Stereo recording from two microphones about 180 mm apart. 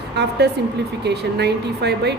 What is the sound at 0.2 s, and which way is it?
A woman's voice, 70° right (ahead or behind).